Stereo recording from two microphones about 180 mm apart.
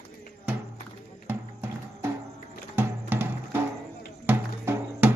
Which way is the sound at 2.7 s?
10° right (ahead or behind).